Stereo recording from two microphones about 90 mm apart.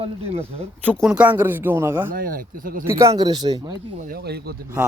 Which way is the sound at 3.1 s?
50° right (ahead or behind).